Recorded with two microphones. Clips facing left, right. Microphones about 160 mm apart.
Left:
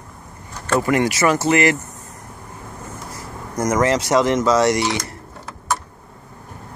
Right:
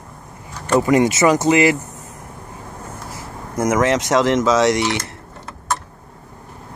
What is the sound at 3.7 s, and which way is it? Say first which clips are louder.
Speech: right 1 dB; centre (ahead or behind).